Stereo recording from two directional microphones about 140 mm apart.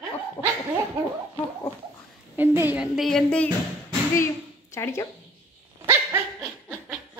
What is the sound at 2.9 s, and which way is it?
Speech, 5° left (ahead or behind).